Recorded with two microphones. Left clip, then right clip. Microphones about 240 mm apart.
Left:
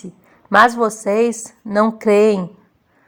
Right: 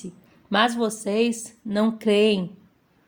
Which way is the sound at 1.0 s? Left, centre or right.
Centre.